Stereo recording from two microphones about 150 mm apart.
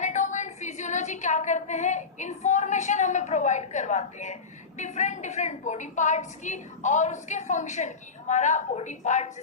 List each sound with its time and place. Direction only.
0.0 s a woman's voice: 55° left (ahead or behind)